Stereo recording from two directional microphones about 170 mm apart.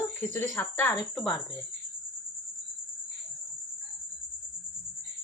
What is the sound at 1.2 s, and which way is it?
Speech, centre (ahead or behind).